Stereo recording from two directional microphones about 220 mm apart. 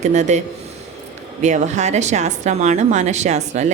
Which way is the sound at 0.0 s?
30° right (ahead or behind).